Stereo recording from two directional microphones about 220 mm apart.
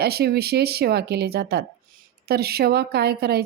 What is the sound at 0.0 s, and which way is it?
A woman's voice, 45° right (ahead or behind).